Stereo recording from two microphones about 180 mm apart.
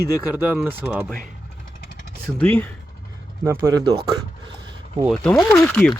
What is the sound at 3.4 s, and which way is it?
Speech, 15° right (ahead or behind).